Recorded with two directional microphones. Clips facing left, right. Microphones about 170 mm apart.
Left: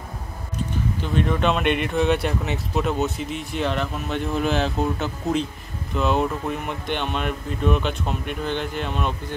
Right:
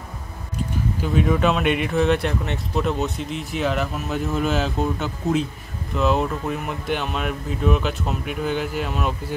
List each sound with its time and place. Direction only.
1.0 s speech: 5° right (ahead or behind)